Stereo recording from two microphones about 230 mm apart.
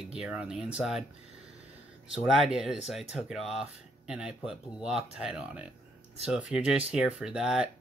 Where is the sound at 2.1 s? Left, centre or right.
Centre.